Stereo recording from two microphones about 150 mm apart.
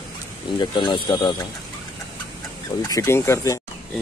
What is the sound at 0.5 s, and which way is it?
Speech, 30° left (ahead or behind).